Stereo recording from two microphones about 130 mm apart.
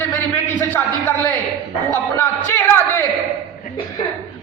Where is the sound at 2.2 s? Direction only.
20° left (ahead or behind).